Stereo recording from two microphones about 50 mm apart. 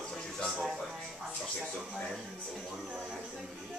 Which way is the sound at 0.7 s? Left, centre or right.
Centre.